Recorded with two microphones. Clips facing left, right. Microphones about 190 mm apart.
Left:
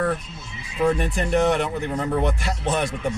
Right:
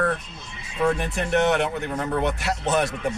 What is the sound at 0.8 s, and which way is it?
Speech, centre (ahead or behind).